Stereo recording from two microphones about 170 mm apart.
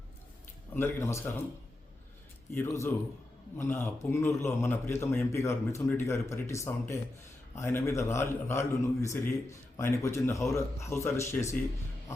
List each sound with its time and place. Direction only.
0.7 s a man's voice: 15° left (ahead or behind)
2.6 s a man's voice: 15° left (ahead or behind)